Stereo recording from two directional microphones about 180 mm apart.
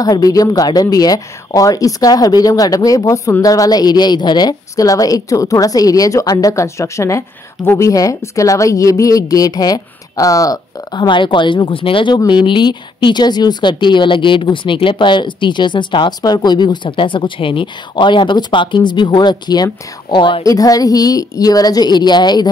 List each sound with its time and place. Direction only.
0.0 s speech: 20° left (ahead or behind)